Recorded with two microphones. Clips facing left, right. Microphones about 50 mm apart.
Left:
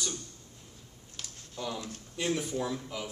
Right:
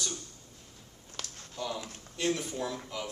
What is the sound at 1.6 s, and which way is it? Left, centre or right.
Speech, left.